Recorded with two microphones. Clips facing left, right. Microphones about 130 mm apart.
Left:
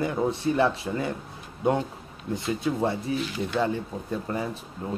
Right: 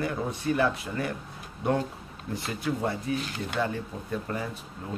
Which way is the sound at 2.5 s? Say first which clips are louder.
Left 2 dB; 25° left (ahead or behind).